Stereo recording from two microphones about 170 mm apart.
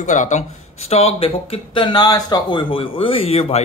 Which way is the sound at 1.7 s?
25° left (ahead or behind).